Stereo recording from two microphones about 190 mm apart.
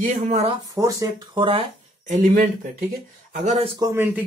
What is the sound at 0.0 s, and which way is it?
Speech, 40° right (ahead or behind).